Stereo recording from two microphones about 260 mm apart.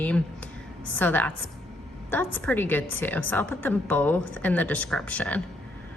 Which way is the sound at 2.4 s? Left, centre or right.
Centre.